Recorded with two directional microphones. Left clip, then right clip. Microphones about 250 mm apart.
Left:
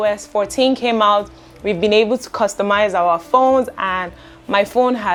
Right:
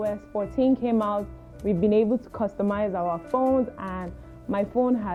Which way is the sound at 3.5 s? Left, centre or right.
Centre.